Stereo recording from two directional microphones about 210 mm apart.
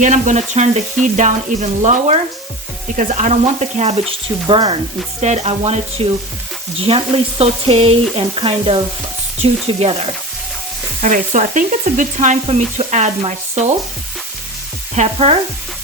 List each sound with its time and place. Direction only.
0.0 s speech: 35° right (ahead or behind)
11.0 s speech: 35° right (ahead or behind)
14.9 s speech: 30° right (ahead or behind)